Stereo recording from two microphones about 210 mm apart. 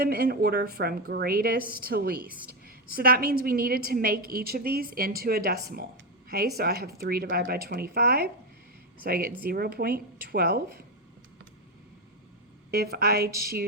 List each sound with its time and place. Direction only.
0.0 s a woman's voice: 45° right (ahead or behind)
12.7 s a woman's voice: 50° right (ahead or behind)